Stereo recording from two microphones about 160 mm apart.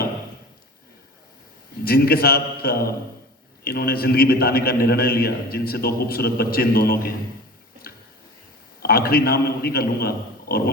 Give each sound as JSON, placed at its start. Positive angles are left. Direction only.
{"t": 1.8, "sound": "a man's voice", "side_deg": 75}
{"t": 8.8, "sound": "a man's voice", "side_deg": 75}